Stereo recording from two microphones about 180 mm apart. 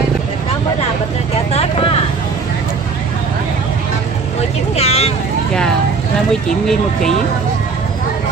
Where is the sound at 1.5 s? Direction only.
35° left (ahead or behind).